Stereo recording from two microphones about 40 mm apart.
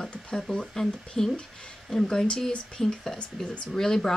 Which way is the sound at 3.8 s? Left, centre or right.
Centre.